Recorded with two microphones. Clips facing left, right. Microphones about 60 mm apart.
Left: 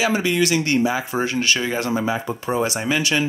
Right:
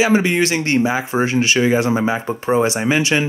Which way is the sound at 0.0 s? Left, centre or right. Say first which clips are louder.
Right 4 dB; right.